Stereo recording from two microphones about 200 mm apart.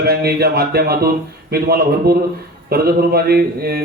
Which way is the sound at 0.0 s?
50° right (ahead or behind).